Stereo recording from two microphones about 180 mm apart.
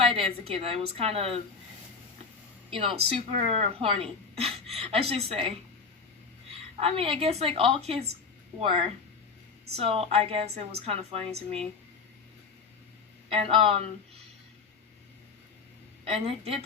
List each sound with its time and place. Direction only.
0.0 s speech: 35° right (ahead or behind)
2.6 s speech: 30° right (ahead or behind)
6.7 s speech: 35° right (ahead or behind)
9.7 s speech: 35° right (ahead or behind)
13.3 s speech: 30° right (ahead or behind)
16.0 s speech: 35° right (ahead or behind)